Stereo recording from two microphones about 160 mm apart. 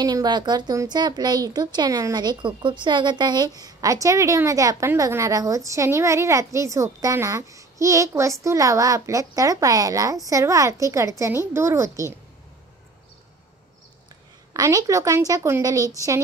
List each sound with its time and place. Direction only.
0.0 s speech: 25° right (ahead or behind)
14.5 s speech: 20° right (ahead or behind)